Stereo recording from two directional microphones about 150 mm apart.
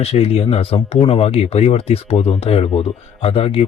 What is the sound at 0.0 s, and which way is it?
Speech, 40° left (ahead or behind).